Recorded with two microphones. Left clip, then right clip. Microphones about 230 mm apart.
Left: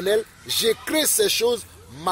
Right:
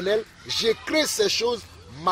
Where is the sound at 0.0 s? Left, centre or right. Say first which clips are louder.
Left 2 dB; left.